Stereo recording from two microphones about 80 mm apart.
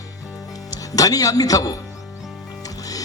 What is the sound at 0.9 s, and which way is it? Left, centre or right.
Speech, left.